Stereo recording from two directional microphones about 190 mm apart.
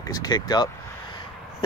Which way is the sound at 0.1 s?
20° left (ahead or behind).